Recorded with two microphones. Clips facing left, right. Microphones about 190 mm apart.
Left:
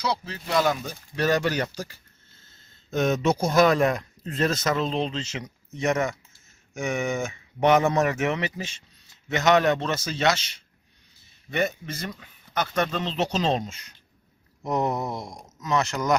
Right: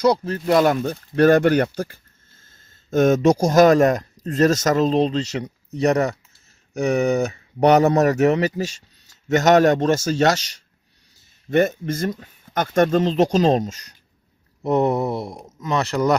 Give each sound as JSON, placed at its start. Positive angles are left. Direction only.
{"t": 0.0, "sound": "speech", "side_deg": -50}